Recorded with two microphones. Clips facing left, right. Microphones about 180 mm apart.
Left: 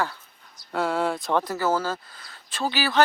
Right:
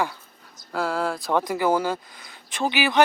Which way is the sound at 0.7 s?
Centre (ahead or behind).